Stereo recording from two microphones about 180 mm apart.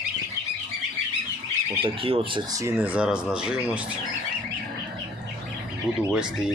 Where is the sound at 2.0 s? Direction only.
30° right (ahead or behind).